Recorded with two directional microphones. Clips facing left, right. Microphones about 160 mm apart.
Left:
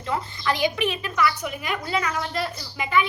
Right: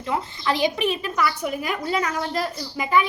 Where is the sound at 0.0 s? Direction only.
20° right (ahead or behind).